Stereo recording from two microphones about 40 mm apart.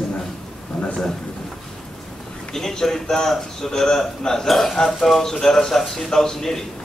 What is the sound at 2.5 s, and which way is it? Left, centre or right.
A man's voice, centre.